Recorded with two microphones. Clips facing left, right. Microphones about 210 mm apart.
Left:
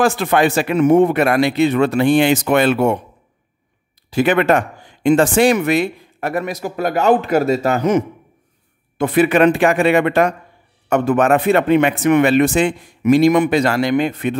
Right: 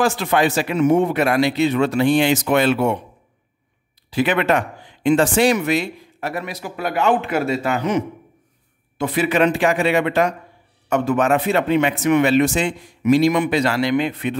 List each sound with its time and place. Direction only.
0.0 s a man's voice: 55° left (ahead or behind)
4.1 s speech: 45° left (ahead or behind)
8.9 s a man's voice: 55° left (ahead or behind)